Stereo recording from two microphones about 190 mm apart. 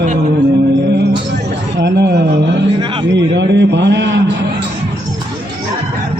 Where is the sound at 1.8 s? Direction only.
60° right (ahead or behind).